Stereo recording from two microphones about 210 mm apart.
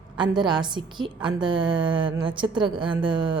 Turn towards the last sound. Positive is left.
turn(degrees=-25)  # may be behind; listen again after turning